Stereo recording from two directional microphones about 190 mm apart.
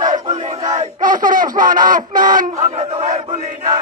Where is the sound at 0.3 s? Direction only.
35° right (ahead or behind).